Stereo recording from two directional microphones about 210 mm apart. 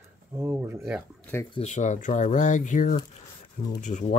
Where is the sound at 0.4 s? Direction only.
10° right (ahead or behind).